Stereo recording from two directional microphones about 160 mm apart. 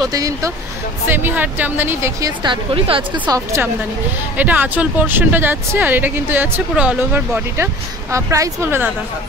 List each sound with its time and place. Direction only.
0.0 s speech: 20° right (ahead or behind)
2.4 s a woman's voice: 35° right (ahead or behind)
3.3 s speech: 20° right (ahead or behind)
4.4 s speech: 10° right (ahead or behind)